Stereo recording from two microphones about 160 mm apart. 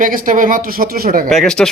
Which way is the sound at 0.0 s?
60° right (ahead or behind).